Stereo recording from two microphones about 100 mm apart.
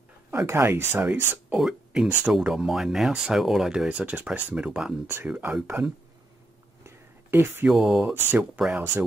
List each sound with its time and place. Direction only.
0.3 s speech: 25° right (ahead or behind)
1.5 s speech: 5° right (ahead or behind)
5.0 s speech: 20° right (ahead or behind)
6.8 s whispering: 25° right (ahead or behind)
7.6 s speech: 5° right (ahead or behind)
8.1 s speech: 20° right (ahead or behind)